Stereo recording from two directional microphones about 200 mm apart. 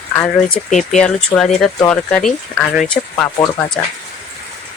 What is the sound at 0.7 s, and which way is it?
Speech, 35° left (ahead or behind).